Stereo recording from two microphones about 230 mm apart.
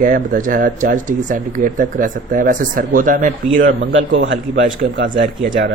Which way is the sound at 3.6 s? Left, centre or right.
Right.